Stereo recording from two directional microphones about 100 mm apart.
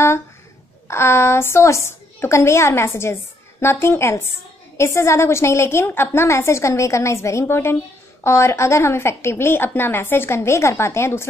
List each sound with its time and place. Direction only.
0.8 s a woman's voice: 25° left (ahead or behind)